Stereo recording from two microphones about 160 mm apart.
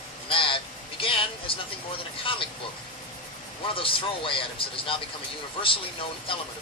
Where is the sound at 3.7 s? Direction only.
35° left (ahead or behind).